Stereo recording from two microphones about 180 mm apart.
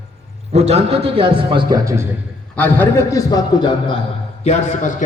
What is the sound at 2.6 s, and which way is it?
A man's voice, 10° left (ahead or behind).